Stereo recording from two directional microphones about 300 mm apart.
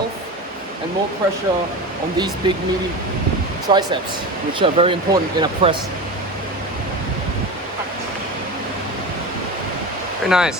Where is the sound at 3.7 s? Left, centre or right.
Centre.